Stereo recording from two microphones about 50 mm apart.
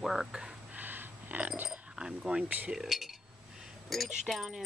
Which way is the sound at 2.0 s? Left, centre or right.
Centre.